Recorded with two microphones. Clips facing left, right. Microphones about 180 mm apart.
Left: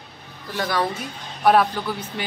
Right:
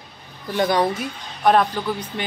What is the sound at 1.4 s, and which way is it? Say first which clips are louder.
Speech: even; 5° left (ahead or behind).